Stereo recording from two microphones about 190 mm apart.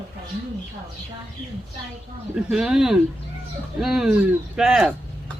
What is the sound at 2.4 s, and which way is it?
Speech, 5° right (ahead or behind).